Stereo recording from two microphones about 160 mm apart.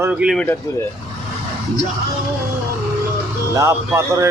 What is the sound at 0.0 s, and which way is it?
Speech, 10° right (ahead or behind).